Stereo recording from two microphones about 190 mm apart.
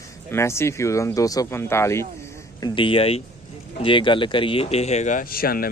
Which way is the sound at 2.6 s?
25° left (ahead or behind).